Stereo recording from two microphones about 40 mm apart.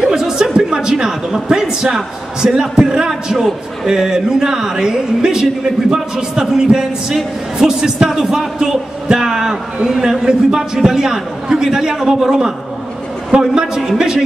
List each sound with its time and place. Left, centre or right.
0.0 s a sound: centre
0.6 s speech: centre
13.3 s a man's voice: right
13.7 s speech: centre